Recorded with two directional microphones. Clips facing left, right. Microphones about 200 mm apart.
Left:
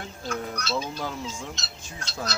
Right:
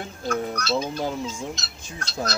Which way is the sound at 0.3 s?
45° right (ahead or behind).